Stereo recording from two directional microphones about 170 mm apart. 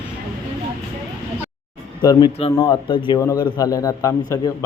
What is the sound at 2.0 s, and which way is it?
A man's voice, 25° left (ahead or behind).